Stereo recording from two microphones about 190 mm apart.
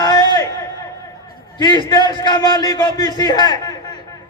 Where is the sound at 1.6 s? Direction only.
20° left (ahead or behind).